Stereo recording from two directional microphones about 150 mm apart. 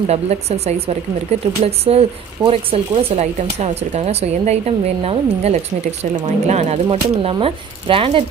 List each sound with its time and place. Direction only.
0.1 s speech: 45° right (ahead or behind)
6.9 s speech: 40° right (ahead or behind)